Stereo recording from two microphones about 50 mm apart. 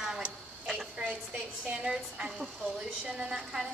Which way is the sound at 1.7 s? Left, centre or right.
Centre.